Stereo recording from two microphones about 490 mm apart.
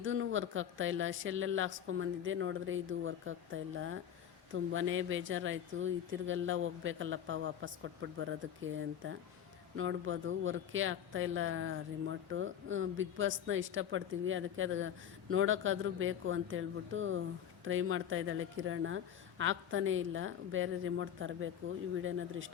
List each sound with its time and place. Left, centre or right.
0.0 s speech: right